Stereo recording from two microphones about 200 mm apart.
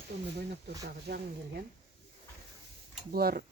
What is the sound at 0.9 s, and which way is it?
Speech, 55° right (ahead or behind).